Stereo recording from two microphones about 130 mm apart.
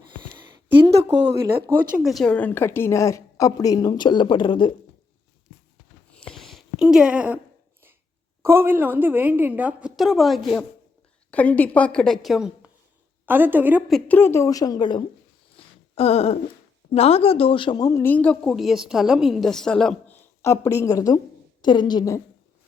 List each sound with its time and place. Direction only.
0.3 s a sound: 35° right (ahead or behind)
2.0 s a woman's voice: centre (ahead or behind)
2.3 s a woman's voice: 15° left (ahead or behind); by 4.7 s 40° left (ahead or behind)
6.2 s a sound: centre (ahead or behind)
8.4 s a woman's voice: 20° right (ahead or behind); by 10.7 s centre (ahead or behind)
11.3 s a woman's voice: 10° left (ahead or behind)
13.2 s a woman's voice: 15° right (ahead or behind)
14.1 s a woman's voice: 20° left (ahead or behind); by 15.0 s 35° left (ahead or behind)
15.5 s a sound: 50° left (ahead or behind)
16.9 s a woman's voice: 50° left (ahead or behind); by 18.5 s 10° left (ahead or behind)
18.5 s a woman's voice: centre (ahead or behind); by 22.2 s 30° left (ahead or behind)